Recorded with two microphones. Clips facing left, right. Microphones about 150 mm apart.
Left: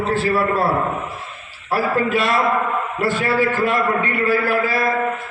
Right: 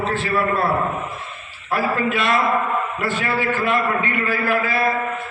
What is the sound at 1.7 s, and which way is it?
A man's voice, 40° left (ahead or behind).